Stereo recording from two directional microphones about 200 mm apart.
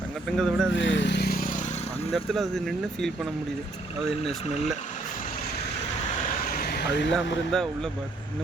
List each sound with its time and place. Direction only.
0.3 s speech: centre (ahead or behind)
0.7 s vehicle: 65° left (ahead or behind); by 1.6 s 45° left (ahead or behind)
2.1 s speech: centre (ahead or behind)
6.5 s a sound: 50° left (ahead or behind)
7.5 s speech: centre (ahead or behind)